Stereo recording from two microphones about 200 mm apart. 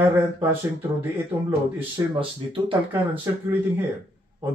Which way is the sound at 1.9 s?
25° right (ahead or behind).